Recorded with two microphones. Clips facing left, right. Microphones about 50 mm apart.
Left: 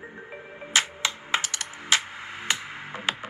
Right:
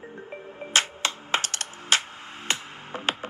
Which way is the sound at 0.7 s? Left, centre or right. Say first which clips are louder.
Even; right.